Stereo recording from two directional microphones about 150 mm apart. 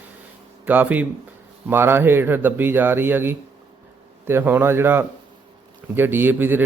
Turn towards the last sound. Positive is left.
turn(degrees=-15)  # may be behind; listen again after turning